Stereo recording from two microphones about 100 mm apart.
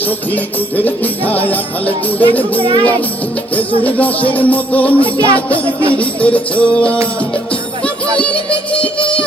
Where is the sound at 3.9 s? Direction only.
15° left (ahead or behind).